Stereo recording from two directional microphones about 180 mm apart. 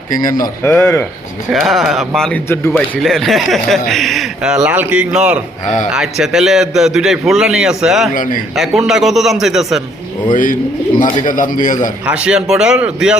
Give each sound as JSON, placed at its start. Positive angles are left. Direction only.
{"t": 0.6, "sound": "speech", "side_deg": 10}
{"t": 1.5, "sound": "speech", "side_deg": 0}
{"t": 5.6, "sound": "a man's voice", "side_deg": 45}
{"t": 5.9, "sound": "speech", "side_deg": -5}
{"t": 8.1, "sound": "a man's voice", "side_deg": 50}
{"t": 8.5, "sound": "speech", "side_deg": 0}
{"t": 10.3, "sound": "a man's voice", "side_deg": 45}
{"t": 12.0, "sound": "speech", "side_deg": -5}